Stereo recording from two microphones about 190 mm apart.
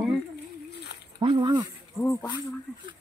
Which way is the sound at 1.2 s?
25° right (ahead or behind).